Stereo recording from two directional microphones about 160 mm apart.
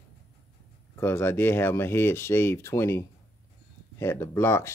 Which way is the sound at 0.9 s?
15° left (ahead or behind).